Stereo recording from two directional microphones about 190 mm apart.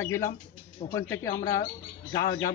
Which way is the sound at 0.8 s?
35° left (ahead or behind).